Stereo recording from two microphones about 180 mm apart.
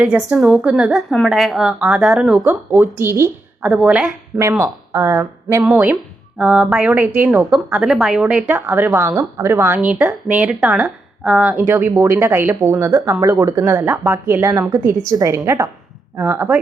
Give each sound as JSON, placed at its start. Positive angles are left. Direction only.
{"t": 0.0, "sound": "speech", "side_deg": -5}
{"t": 2.4, "sound": "speech", "side_deg": -15}